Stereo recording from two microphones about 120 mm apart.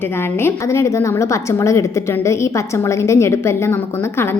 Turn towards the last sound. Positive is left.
turn(degrees=20)  # may be behind; listen again after turning